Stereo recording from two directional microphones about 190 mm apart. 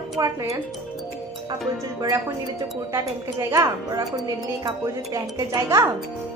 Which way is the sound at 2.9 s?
15° right (ahead or behind).